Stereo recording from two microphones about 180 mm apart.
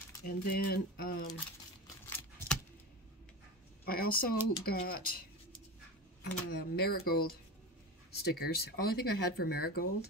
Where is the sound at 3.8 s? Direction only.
55° left (ahead or behind).